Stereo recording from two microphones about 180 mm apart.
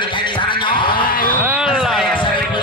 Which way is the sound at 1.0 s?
50° left (ahead or behind).